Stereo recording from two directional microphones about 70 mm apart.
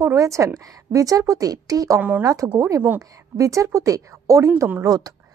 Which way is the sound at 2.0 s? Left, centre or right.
Right.